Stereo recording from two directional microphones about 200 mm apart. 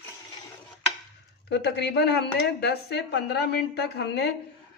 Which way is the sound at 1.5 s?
60° left (ahead or behind).